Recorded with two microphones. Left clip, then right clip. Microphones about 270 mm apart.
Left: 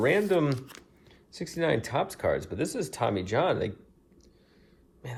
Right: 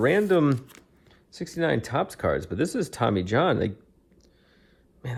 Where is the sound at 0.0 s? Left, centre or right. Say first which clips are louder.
Right 3 dB; right.